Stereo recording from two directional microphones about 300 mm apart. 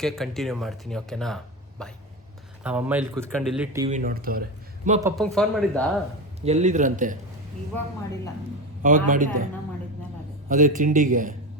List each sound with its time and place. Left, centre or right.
0.0 s speech: centre
3.8 s a man's voice: right
4.9 s speech: centre
6.4 s a man's voice: right
8.8 s a man's voice: right
10.5 s a man's voice: right